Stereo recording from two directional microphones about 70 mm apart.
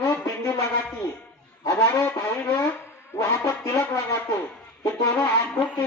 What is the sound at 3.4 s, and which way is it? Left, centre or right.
Speech, left.